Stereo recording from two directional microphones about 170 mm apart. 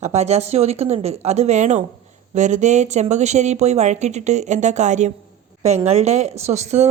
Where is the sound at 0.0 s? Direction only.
40° right (ahead or behind).